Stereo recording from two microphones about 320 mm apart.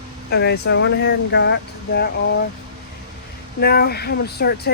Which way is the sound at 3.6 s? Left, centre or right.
Left.